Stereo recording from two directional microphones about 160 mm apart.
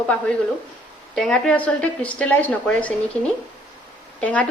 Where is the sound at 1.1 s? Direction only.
5° left (ahead or behind).